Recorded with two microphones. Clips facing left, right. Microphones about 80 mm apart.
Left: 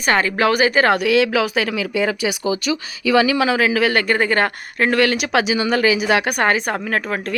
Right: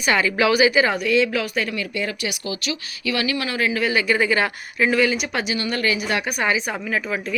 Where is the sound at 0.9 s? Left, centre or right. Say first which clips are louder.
Left 4 dB; left.